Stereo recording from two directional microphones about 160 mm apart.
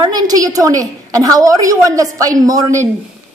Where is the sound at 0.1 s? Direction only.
25° right (ahead or behind).